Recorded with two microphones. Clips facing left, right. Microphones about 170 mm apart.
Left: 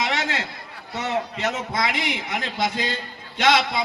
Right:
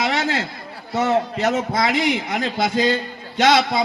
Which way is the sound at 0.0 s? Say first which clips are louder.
Right 4 dB; 40° right (ahead or behind).